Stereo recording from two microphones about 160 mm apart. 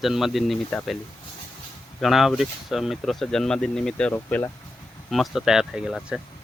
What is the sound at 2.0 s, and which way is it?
Speech, centre (ahead or behind).